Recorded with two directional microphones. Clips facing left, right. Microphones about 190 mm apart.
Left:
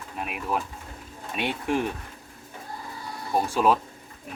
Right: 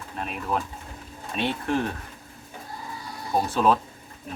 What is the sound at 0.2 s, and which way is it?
Speech, 10° left (ahead or behind).